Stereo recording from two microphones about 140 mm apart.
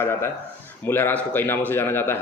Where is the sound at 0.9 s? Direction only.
15° left (ahead or behind).